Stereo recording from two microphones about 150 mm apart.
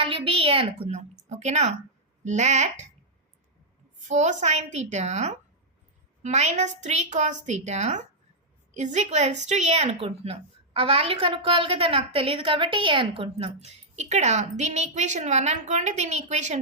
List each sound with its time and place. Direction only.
0.0 s a woman's voice: 40° right (ahead or behind)
0.9 s a woman's voice: 50° right (ahead or behind)
4.1 s a woman's voice: 50° right (ahead or behind)